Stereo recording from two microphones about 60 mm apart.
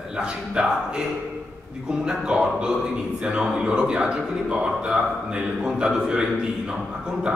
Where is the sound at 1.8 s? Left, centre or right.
Centre.